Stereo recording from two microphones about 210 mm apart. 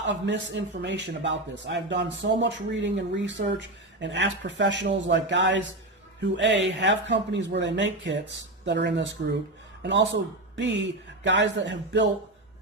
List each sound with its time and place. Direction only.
0.0 s a man's voice: 60° right (ahead or behind)